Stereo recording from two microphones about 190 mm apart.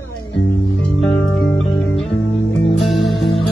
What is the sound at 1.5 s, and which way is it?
Music, 5° left (ahead or behind).